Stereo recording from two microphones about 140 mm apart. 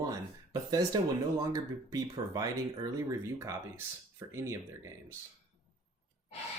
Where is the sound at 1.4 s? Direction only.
25° right (ahead or behind).